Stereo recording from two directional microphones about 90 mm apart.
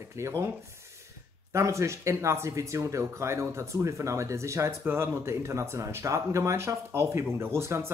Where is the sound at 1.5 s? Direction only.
35° right (ahead or behind).